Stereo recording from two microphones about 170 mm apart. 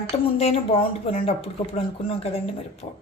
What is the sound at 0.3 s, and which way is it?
Speech, 35° left (ahead or behind).